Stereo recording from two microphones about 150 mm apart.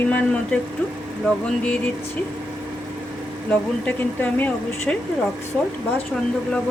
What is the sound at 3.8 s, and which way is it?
Speech, 10° left (ahead or behind).